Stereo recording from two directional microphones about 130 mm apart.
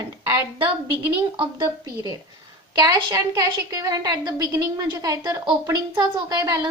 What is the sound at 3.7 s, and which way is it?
A woman's voice, 30° right (ahead or behind).